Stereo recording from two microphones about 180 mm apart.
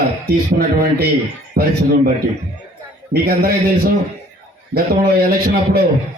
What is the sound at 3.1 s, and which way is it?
Speech, 60° right (ahead or behind).